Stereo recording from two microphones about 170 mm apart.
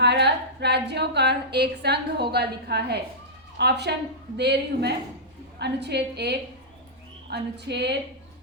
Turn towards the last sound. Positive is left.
turn(degrees=-85)